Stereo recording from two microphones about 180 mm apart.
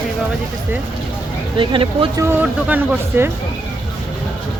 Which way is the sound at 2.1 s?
10° right (ahead or behind).